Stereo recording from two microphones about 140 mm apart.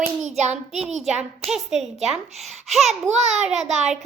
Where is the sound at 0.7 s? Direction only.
55° right (ahead or behind).